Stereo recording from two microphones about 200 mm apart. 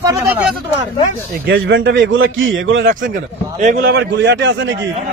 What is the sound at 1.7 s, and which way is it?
A man's voice, 65° right (ahead or behind).